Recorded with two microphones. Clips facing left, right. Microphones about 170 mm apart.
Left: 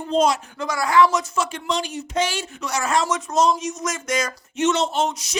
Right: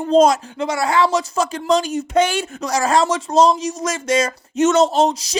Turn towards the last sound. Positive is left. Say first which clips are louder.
# right 7 dB
turn(degrees=-35)  # may be behind; listen again after turning